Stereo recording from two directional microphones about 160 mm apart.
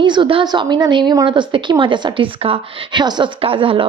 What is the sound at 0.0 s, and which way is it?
A woman's voice, 30° right (ahead or behind).